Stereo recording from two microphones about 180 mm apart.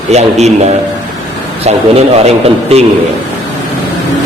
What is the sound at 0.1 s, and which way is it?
Speech, 40° right (ahead or behind).